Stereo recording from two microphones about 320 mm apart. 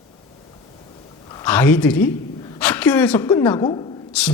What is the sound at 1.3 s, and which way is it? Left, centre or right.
A woman's voice, centre.